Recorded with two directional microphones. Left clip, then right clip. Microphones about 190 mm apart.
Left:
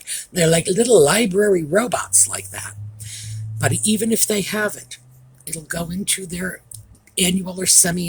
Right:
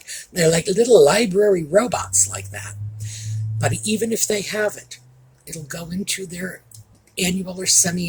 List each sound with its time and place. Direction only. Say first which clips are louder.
0.0 s speech: right 1 dB; 50° left (ahead or behind)